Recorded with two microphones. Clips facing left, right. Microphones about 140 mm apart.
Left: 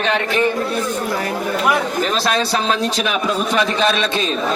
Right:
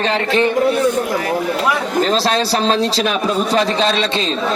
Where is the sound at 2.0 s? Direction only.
30° right (ahead or behind).